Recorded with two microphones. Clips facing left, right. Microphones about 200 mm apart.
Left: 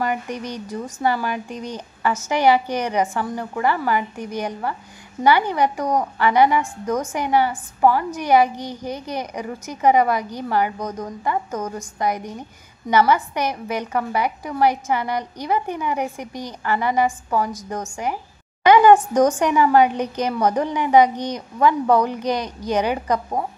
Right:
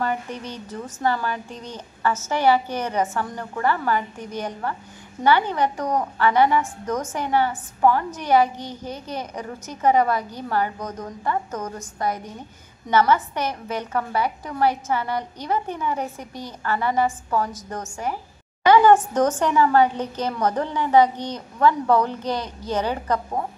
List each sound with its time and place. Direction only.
0.0 s a woman's voice: 15° left (ahead or behind)